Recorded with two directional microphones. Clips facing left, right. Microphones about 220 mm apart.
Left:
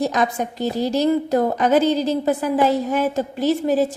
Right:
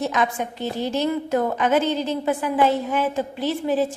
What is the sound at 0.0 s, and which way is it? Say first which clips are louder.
A woman's voice: left 3 dB; 40° left (ahead or behind).